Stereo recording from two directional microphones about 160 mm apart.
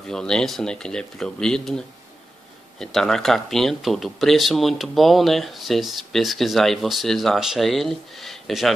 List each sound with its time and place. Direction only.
0.1 s speech: 5° left (ahead or behind)